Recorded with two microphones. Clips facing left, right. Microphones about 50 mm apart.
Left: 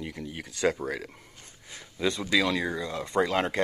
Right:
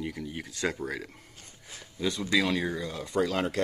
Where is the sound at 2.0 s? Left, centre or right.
Left.